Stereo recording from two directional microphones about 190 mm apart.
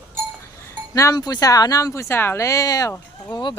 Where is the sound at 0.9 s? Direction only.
20° left (ahead or behind).